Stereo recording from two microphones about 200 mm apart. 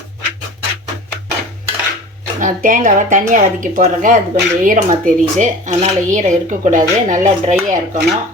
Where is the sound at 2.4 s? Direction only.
40° right (ahead or behind).